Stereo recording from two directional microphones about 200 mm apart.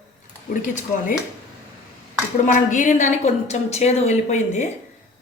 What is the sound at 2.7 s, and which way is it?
A woman's voice, 40° left (ahead or behind).